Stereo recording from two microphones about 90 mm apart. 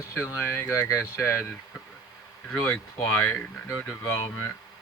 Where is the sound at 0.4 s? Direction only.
30° left (ahead or behind).